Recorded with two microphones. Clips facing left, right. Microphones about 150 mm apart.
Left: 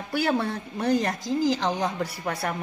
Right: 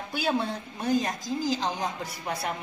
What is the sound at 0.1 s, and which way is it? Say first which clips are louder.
A woman's voice: left 3 dB; 65° left (ahead or behind).